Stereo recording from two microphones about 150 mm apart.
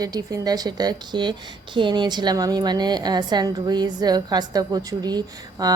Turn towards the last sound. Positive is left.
turn(degrees=-25)  # may be behind; listen again after turning